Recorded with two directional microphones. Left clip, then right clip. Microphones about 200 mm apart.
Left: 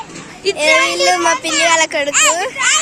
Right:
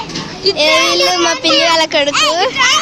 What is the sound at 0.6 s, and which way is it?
Speech, 10° left (ahead or behind).